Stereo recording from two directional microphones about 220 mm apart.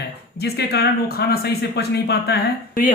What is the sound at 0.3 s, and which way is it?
Speech, 45° left (ahead or behind).